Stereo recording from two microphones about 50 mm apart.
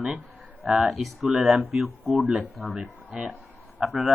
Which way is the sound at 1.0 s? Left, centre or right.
Centre.